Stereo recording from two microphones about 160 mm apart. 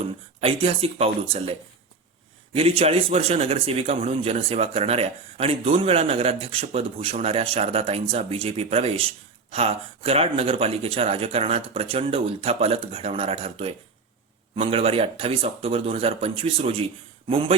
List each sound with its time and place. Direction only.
0.3 s a man's voice: 35° right (ahead or behind)